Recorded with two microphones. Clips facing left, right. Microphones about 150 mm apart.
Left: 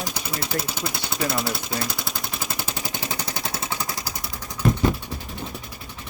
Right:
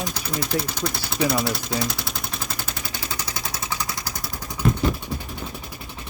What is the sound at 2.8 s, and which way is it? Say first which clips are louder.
Machine gun: left 2 dB; 20° left (ahead or behind).